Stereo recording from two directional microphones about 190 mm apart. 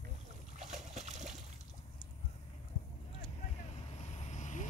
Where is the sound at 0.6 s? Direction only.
40° right (ahead or behind).